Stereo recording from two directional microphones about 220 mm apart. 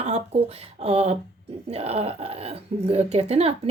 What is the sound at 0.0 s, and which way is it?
Speech, 25° right (ahead or behind).